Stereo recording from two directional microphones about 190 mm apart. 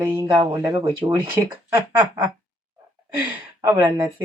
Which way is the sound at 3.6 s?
15° right (ahead or behind).